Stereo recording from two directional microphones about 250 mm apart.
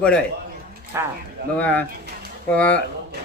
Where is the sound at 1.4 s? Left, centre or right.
Right.